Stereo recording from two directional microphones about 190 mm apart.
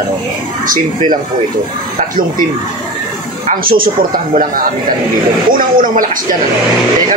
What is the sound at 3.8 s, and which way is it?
Speech, 50° right (ahead or behind).